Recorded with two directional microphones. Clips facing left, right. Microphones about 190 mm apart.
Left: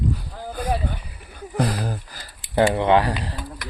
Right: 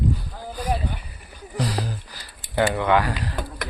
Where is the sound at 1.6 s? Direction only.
55° left (ahead or behind).